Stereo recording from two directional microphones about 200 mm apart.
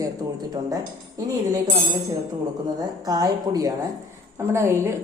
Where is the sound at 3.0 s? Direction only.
20° right (ahead or behind).